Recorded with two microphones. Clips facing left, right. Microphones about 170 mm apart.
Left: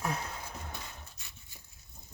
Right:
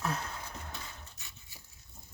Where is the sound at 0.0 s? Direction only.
15° left (ahead or behind).